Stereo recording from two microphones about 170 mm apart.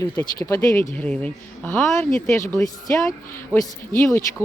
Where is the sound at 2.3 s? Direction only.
15° left (ahead or behind).